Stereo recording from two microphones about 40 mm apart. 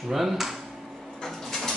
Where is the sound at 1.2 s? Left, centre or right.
Centre.